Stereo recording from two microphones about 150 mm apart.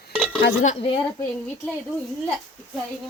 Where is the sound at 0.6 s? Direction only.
45° left (ahead or behind).